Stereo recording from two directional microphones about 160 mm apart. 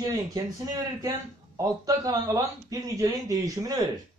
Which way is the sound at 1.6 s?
20° right (ahead or behind).